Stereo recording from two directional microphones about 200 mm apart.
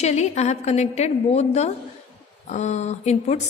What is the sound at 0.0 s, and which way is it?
A woman's voice, 35° left (ahead or behind).